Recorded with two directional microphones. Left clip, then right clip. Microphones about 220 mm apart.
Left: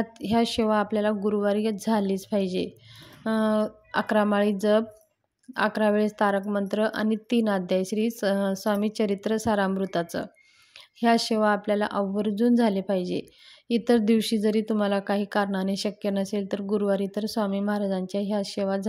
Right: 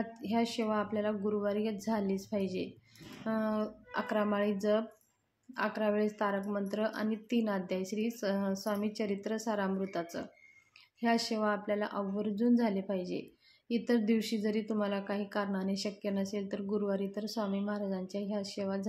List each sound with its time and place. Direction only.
0.0 s speech: 40° left (ahead or behind)